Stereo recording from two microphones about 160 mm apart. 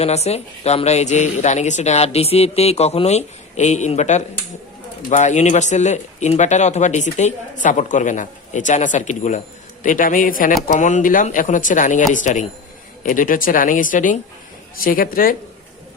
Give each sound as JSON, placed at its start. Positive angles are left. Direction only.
{"t": 0.0, "sound": "speech", "side_deg": 40}